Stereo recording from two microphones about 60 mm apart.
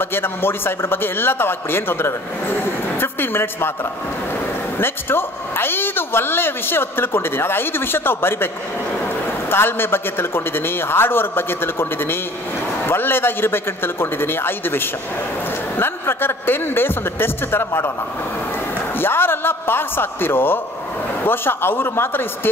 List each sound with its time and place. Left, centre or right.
0.0 s a woman's voice: left
4.7 s a woman's voice: left
9.5 s a woman's voice: left
15.8 s a woman's voice: left
18.9 s a woman's voice: left